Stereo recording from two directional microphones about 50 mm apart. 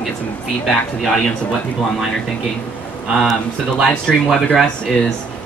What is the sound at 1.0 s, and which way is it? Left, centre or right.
Speech, centre.